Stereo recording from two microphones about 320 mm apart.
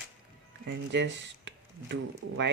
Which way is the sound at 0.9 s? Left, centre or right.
Right.